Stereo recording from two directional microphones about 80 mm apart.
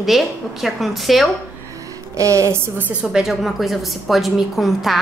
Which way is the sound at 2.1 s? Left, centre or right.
Right.